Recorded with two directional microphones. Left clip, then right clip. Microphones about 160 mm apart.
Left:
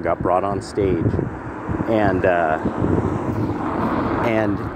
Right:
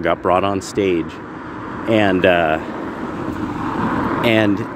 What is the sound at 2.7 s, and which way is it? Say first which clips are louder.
Speech: left 4 dB; 10° right (ahead or behind).